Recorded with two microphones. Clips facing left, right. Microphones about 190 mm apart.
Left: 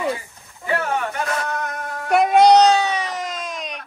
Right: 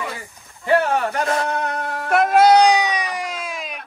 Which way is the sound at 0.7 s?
30° right (ahead or behind).